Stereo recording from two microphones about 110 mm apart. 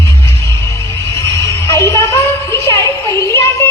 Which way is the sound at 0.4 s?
25° left (ahead or behind).